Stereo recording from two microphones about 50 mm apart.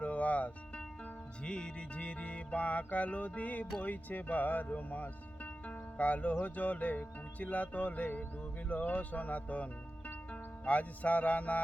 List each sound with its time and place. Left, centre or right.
0.0 s music: left
3.8 s speech: left
10.7 s music: left